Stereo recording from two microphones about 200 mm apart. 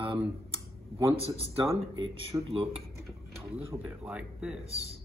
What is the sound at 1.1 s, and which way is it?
Speech, 30° right (ahead or behind).